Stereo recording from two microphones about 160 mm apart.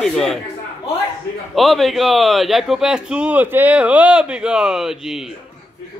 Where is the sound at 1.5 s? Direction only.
Centre (ahead or behind).